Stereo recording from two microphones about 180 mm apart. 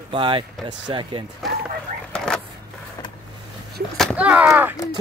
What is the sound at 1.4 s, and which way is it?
Speech, centre (ahead or behind).